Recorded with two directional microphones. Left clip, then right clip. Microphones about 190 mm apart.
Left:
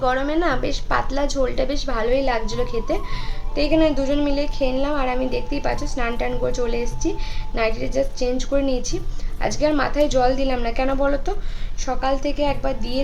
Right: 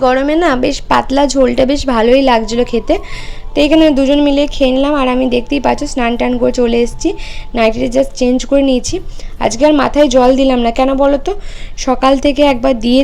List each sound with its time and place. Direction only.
0.0 s a woman's voice: 35° right (ahead or behind)
11.8 s a woman's voice: 45° right (ahead or behind)